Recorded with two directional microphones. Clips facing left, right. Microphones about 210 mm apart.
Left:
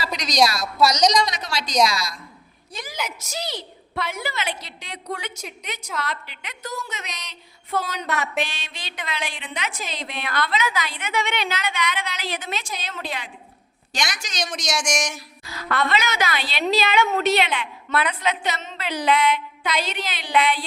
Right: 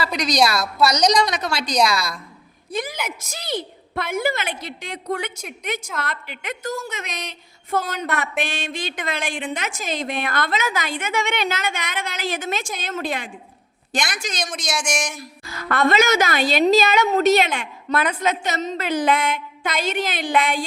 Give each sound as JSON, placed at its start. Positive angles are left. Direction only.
{"t": 0.2, "sound": "a woman's voice", "side_deg": -60}
{"t": 1.9, "sound": "a woman's voice", "side_deg": -60}
{"t": 14.5, "sound": "speech", "side_deg": 0}
{"t": 15.4, "sound": "a woman's voice", "side_deg": -50}